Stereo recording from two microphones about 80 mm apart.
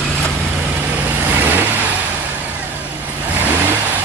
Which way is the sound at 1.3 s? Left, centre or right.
Right.